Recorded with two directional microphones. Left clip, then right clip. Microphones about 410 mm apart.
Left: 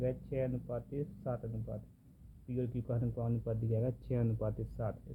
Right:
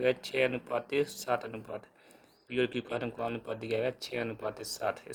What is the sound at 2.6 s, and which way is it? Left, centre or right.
Speech, centre.